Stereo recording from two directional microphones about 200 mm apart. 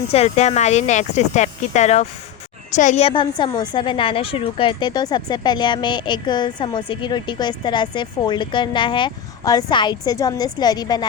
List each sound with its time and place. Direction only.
0.1 s a woman's voice: 30° left (ahead or behind)